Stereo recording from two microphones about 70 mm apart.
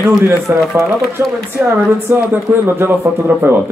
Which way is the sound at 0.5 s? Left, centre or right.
Centre.